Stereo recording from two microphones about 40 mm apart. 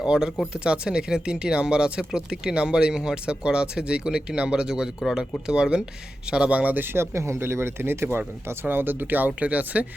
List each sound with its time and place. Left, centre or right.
0.0 s speech: centre
6.5 s speech: right
6.7 s speech: right
9.4 s speech: right